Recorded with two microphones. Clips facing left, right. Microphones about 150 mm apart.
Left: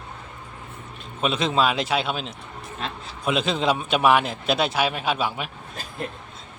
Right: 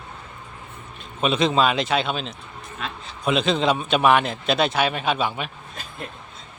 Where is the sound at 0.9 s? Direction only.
Centre (ahead or behind).